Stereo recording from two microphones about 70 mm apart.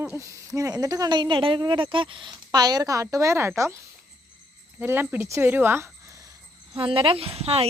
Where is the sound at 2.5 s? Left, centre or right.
Right.